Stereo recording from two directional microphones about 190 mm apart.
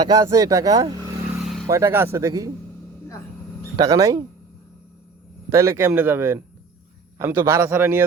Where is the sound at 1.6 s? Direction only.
15° right (ahead or behind).